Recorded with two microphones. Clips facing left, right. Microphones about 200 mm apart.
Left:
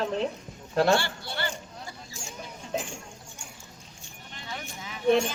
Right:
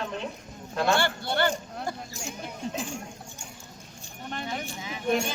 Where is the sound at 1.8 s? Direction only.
65° right (ahead or behind).